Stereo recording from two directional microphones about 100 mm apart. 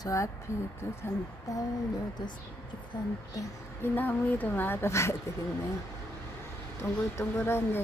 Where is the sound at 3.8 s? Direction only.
20° left (ahead or behind).